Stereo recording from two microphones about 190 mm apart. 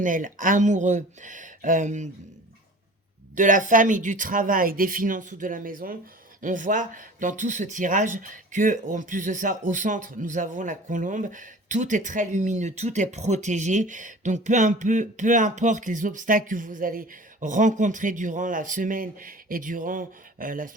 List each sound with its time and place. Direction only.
0.0 s speech: 45° right (ahead or behind)
3.3 s speech: 45° right (ahead or behind)